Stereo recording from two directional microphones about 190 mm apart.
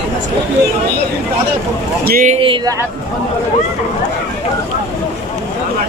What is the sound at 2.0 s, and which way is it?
Speech, 50° right (ahead or behind).